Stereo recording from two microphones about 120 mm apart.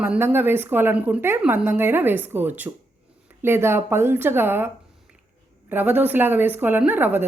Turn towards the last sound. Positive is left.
turn(degrees=-15)  # may be behind; listen again after turning